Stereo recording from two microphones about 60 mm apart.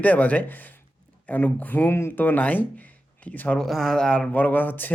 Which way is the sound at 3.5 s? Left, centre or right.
Centre.